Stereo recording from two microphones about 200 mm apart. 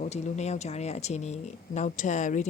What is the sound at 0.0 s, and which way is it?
Speech, 35° left (ahead or behind).